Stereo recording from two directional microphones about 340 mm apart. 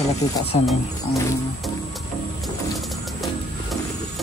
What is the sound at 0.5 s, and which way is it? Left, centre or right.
Speech, centre.